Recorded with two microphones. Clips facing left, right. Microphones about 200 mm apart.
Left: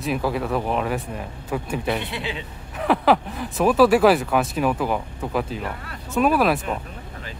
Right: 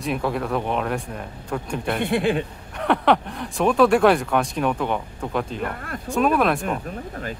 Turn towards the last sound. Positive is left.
turn(degrees=0)  # may be behind; listen again after turning